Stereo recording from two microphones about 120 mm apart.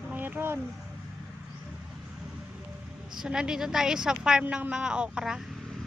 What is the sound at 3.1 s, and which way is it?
A woman's voice, 5° right (ahead or behind).